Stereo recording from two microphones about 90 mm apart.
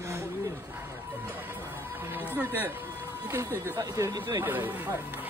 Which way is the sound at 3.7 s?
40° right (ahead or behind).